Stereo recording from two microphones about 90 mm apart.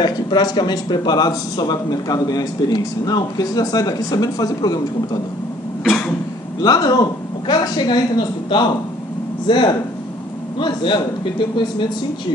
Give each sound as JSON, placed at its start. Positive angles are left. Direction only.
{"t": 0.0, "sound": "a man's voice", "side_deg": 55}
{"t": 6.6, "sound": "a man's voice", "side_deg": 45}